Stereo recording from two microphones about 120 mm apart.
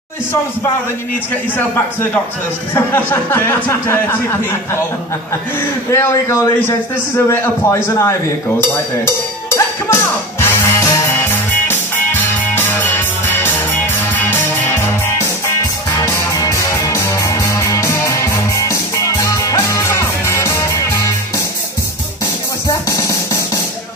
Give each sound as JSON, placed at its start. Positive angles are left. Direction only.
{"t": 2.7, "sound": "speech", "side_deg": 15}
{"t": 5.9, "sound": "a man's voice", "side_deg": 25}
{"t": 9.0, "sound": "music", "side_deg": 20}
{"t": 16.0, "sound": "music", "side_deg": 25}
{"t": 22.7, "sound": "music", "side_deg": 25}